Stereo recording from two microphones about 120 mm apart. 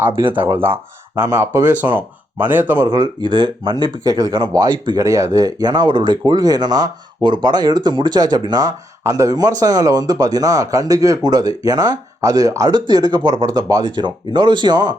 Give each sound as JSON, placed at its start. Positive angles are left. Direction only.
{"t": 0.3, "sound": "speech", "side_deg": -20}
{"t": 2.8, "sound": "speech", "side_deg": -35}